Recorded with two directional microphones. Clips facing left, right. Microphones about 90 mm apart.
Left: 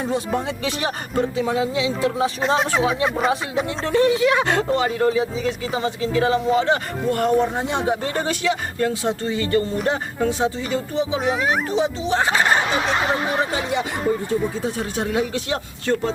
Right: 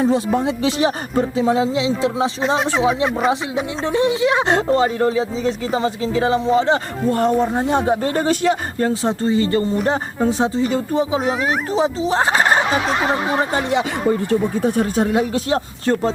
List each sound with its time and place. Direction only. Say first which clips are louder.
0.3 s speech: right 6 dB; 30° right (ahead or behind)
2.4 s speech: right 2 dB; centre (ahead or behind)
3.8 s speech: even; 20° right (ahead or behind); by 11.3 s 40° right (ahead or behind)
11.3 s speech: right 1 dB; centre (ahead or behind)
11.7 s speech: right 3 dB; 35° right (ahead or behind)
13.7 s speech: right 4 dB; 80° right
14.5 s speech: right 7 dB; 50° right (ahead or behind)